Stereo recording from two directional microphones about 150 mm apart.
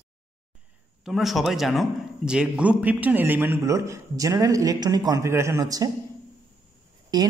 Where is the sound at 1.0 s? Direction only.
Centre (ahead or behind); by 5.9 s 25° right (ahead or behind).